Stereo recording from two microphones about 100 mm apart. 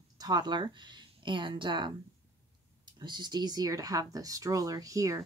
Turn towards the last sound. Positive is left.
turn(degrees=-35)  # may be behind; listen again after turning